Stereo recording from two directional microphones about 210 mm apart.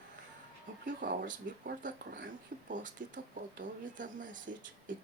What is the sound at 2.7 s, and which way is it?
Speech, 40° right (ahead or behind).